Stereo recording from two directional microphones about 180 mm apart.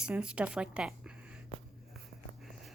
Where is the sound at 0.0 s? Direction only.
5° right (ahead or behind).